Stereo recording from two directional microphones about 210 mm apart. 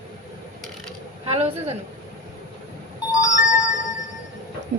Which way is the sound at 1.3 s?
30° right (ahead or behind).